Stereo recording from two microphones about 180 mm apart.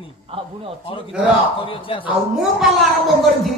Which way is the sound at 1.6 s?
30° left (ahead or behind).